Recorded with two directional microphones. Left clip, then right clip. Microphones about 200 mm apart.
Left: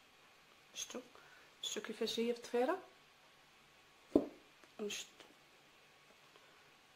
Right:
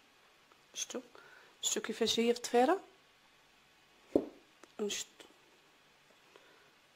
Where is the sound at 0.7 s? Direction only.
40° right (ahead or behind).